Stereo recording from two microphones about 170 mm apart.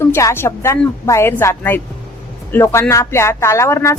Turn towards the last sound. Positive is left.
turn(degrees=15)  # may be behind; listen again after turning